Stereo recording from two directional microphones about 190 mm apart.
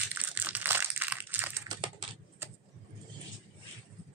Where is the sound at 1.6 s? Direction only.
25° right (ahead or behind).